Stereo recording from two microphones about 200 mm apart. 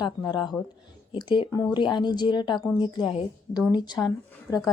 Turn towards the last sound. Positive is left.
turn(degrees=15)  # may be behind; listen again after turning